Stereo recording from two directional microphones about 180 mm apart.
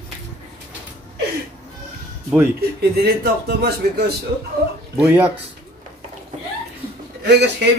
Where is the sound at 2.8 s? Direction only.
60° right (ahead or behind).